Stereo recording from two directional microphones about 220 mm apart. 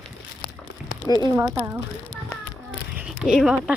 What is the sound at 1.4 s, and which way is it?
Speech, 15° right (ahead or behind).